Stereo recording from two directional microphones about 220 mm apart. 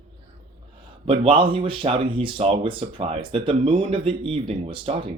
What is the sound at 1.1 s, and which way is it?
Speech, 25° right (ahead or behind).